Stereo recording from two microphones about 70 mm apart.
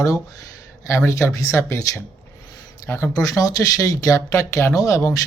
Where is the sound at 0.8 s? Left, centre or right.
Left.